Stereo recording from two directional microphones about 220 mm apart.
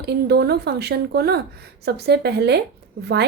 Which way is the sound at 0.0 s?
50° right (ahead or behind).